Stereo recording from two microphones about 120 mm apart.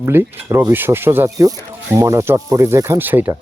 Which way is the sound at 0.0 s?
20° right (ahead or behind).